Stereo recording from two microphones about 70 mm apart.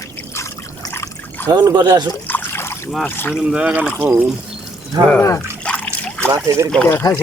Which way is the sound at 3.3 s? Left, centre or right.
Centre.